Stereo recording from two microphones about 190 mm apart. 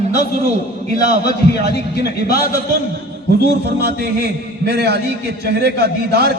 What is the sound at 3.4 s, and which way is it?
A man's voice, 60° right (ahead or behind).